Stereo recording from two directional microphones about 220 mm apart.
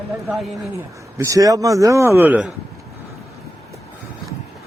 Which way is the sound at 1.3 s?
15° right (ahead or behind).